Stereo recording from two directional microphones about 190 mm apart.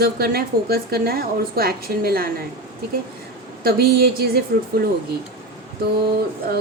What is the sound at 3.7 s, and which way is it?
A woman's voice, 55° right (ahead or behind).